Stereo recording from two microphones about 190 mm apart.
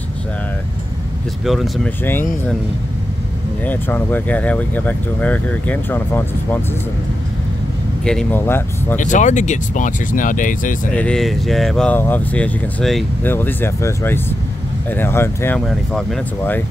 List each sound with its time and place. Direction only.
1.4 s speech: centre (ahead or behind)
2.0 s speech: 10° left (ahead or behind)
3.6 s speech: 10° left (ahead or behind)
8.0 s speech: 5° left (ahead or behind)
8.9 s speech: 40° left (ahead or behind)
10.9 s speech: 5° left (ahead or behind)